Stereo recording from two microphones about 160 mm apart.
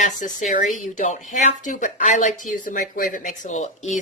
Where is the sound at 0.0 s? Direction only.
50° left (ahead or behind).